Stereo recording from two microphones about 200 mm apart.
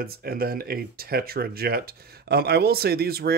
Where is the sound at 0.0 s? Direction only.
50° right (ahead or behind).